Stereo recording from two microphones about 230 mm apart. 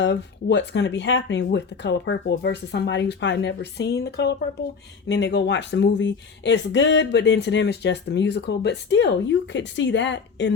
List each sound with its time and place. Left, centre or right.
0.0 s speech: left